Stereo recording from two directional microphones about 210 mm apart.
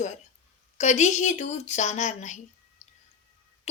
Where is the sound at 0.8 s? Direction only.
35° left (ahead or behind).